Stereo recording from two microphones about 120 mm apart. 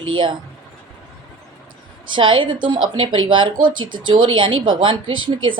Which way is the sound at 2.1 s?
45° right (ahead or behind).